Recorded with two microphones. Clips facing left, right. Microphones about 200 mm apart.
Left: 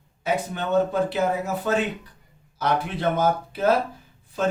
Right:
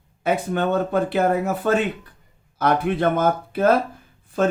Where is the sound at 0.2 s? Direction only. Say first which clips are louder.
Right 5 dB; 55° right (ahead or behind).